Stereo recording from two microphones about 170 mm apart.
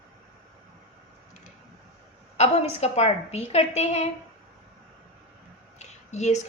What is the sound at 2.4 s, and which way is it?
Speech, 40° left (ahead or behind).